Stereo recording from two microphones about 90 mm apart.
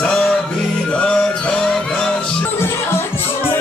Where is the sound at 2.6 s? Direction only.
25° left (ahead or behind).